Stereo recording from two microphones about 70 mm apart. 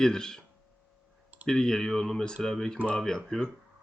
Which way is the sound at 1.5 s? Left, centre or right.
Centre.